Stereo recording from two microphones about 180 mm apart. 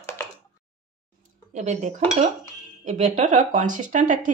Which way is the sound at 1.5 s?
40° right (ahead or behind).